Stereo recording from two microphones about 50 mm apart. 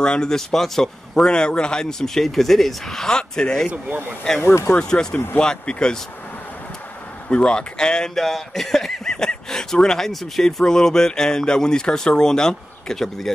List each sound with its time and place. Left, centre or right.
0.0 s speech: centre
3.7 s speech: right
4.6 s speech: centre
7.2 s speech: centre